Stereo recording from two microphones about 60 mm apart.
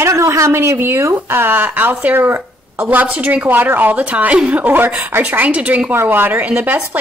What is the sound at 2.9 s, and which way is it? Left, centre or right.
A woman's voice, right.